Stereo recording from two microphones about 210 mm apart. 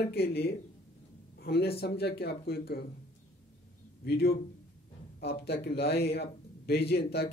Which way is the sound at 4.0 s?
50° left (ahead or behind).